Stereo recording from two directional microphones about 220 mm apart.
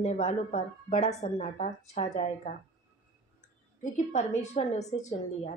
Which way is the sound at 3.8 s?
35° left (ahead or behind).